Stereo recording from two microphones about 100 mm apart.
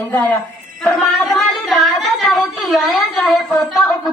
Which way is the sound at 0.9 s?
Centre (ahead or behind).